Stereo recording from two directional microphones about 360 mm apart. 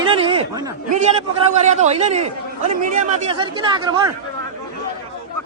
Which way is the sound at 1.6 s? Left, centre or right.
Centre.